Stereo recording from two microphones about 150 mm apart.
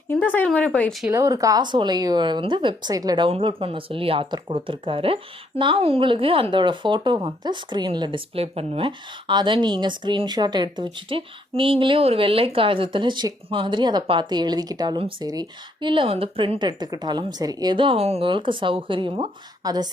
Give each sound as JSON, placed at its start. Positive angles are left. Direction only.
{"t": 0.1, "sound": "speech", "side_deg": 10}
{"t": 1.1, "sound": "speech", "side_deg": -20}